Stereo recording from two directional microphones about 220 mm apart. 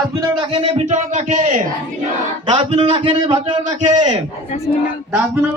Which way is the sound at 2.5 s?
25° right (ahead or behind).